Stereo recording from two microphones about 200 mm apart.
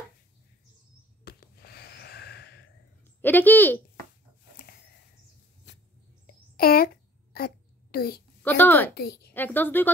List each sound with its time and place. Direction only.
1.2 s gasp: 50° left (ahead or behind)
3.2 s a woman's voice: 10° left (ahead or behind)
5.7 s mouse: 60° left (ahead or behind)
6.2 s a sound: 50° left (ahead or behind)
8.4 s a woman's voice: 10° left (ahead or behind)
8.9 s a woman's voice: 50° left (ahead or behind)
9.3 s a woman's voice: 10° left (ahead or behind)